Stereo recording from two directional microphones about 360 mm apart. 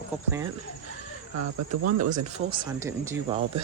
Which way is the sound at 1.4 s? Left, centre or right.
Right.